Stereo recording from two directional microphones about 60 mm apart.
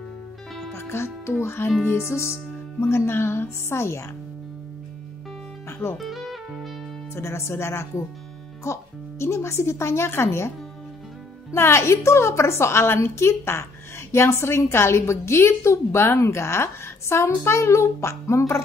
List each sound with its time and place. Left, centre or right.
0.7 s music: left
1.4 s a woman's voice: left
5.7 s music: left
5.9 s music: centre
7.2 s a woman's voice: left
11.5 s a woman's voice: left